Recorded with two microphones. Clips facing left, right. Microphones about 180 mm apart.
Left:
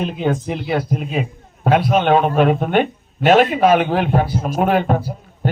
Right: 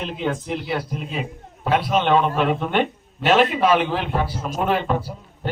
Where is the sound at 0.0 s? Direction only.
50° left (ahead or behind).